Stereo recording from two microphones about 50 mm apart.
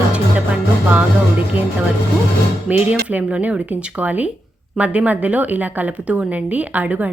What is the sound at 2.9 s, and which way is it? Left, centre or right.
Speech, right.